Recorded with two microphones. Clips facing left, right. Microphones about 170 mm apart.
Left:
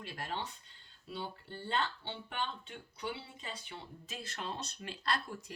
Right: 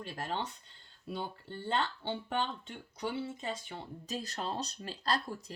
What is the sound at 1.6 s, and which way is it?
Speech, 40° right (ahead or behind).